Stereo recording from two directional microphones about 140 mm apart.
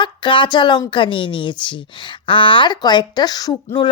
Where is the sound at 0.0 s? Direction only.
35° left (ahead or behind).